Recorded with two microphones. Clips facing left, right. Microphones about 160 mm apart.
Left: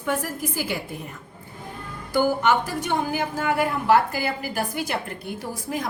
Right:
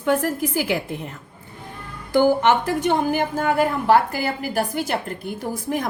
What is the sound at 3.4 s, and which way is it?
Speech, 35° right (ahead or behind).